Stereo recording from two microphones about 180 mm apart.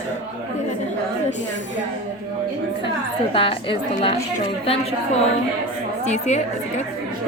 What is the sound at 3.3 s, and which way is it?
Speech, 30° left (ahead or behind).